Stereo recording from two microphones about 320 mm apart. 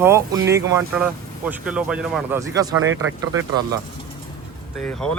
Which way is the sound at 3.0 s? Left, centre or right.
Centre.